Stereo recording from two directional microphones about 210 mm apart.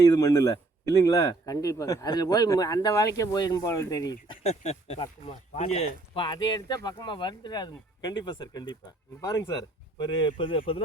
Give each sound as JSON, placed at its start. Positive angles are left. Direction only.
{"t": 0.0, "sound": "speech", "side_deg": 15}
{"t": 4.4, "sound": "speech", "side_deg": 30}